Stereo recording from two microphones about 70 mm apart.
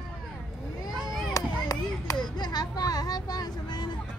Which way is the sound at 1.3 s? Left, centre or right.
Left.